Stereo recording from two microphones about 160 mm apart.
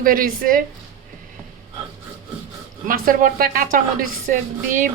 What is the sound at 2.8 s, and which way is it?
A woman's voice, 60° right (ahead or behind).